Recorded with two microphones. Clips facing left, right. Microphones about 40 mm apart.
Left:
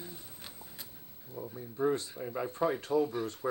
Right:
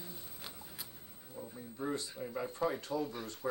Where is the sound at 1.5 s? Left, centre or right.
Centre.